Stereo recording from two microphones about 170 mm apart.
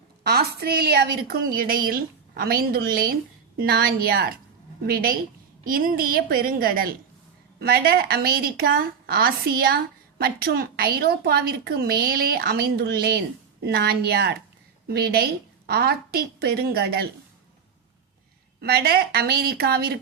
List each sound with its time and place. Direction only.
0.3 s a woman's voice: 65° right (ahead or behind)
18.6 s a woman's voice: 65° right (ahead or behind)